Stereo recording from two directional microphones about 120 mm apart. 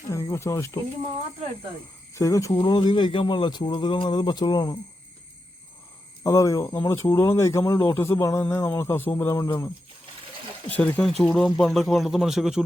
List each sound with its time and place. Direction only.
0.1 s speech: 25° left (ahead or behind)
2.1 s speech: 25° left (ahead or behind)
6.2 s speech: 25° left (ahead or behind)
10.7 s speech: 10° left (ahead or behind); by 12.6 s 5° right (ahead or behind)